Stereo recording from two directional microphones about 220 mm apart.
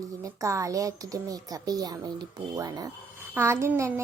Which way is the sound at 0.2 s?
15° right (ahead or behind).